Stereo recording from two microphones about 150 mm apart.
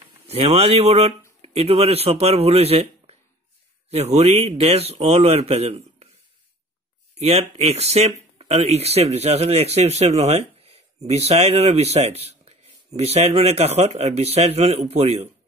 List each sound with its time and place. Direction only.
0.3 s speech: 40° right (ahead or behind)
7.2 s speech: 45° right (ahead or behind)